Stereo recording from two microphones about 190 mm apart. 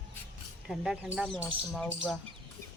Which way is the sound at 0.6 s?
Centre (ahead or behind).